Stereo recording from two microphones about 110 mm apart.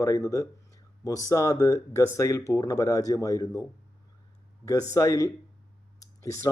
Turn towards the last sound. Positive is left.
turn(degrees=30)  # may be behind; listen again after turning